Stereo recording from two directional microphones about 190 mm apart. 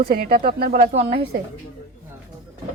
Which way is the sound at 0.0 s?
50° right (ahead or behind).